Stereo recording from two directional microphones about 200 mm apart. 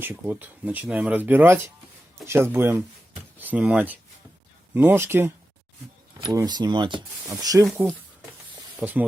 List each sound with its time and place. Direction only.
0.0 s speech: 10° right (ahead or behind)